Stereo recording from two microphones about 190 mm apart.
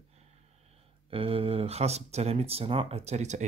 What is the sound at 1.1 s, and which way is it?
Speech, 30° right (ahead or behind).